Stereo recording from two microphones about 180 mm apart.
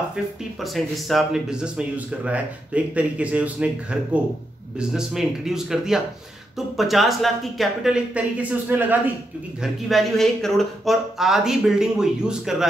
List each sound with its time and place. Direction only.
0.7 s speech: centre (ahead or behind)